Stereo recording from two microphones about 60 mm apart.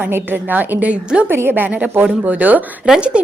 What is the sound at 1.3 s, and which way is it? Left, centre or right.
A woman's voice, right.